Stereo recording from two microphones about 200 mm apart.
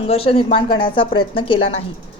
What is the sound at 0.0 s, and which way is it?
Speech, 30° left (ahead or behind).